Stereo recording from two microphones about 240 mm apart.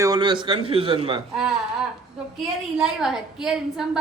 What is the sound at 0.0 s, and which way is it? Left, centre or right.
A man's voice, centre.